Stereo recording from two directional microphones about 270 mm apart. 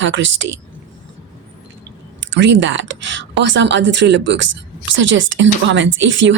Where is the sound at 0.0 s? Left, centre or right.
Right.